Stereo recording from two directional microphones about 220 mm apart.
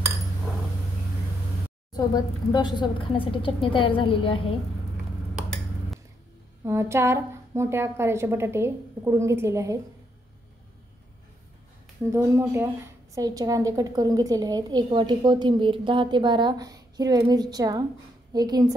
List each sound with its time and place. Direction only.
1.9 s a woman's voice: 20° left (ahead or behind)
6.6 s a woman's voice: 10° right (ahead or behind)
12.0 s a woman's voice: 15° right (ahead or behind)